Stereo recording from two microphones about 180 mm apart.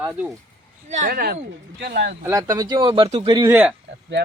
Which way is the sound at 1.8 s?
70° right (ahead or behind).